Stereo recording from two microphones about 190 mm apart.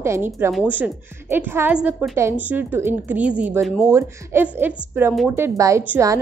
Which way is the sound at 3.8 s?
15° right (ahead or behind).